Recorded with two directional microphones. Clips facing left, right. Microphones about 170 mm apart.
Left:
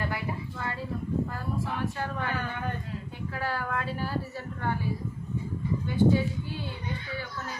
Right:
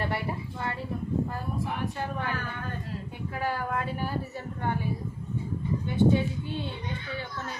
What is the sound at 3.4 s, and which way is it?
Speech, 15° right (ahead or behind).